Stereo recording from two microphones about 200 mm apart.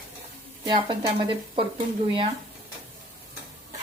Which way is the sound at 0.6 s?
20° right (ahead or behind).